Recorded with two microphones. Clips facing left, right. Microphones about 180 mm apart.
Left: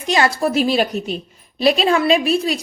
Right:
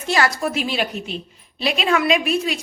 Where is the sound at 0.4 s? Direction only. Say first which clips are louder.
Left 6 dB; 40° left (ahead or behind).